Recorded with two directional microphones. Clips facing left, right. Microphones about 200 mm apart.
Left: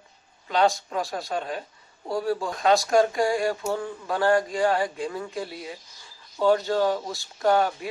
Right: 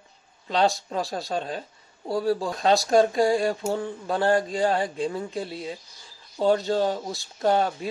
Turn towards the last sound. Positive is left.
turn(degrees=-25)  # may be behind; listen again after turning